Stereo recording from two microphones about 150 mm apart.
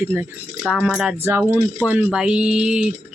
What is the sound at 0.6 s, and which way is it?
Speech, centre (ahead or behind).